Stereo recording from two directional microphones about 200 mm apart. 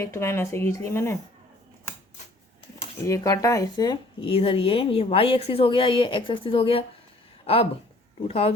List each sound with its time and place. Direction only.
0.0 s speech: 15° left (ahead or behind)
3.1 s speech: 15° left (ahead or behind)